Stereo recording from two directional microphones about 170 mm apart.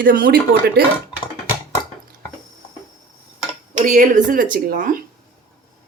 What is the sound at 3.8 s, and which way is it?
Speech, 50° right (ahead or behind).